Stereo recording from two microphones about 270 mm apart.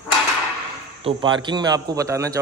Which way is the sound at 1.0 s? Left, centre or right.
Centre.